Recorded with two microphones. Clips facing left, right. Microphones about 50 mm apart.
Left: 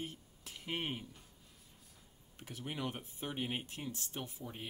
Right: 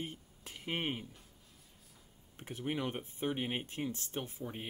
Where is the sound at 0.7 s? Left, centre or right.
Right.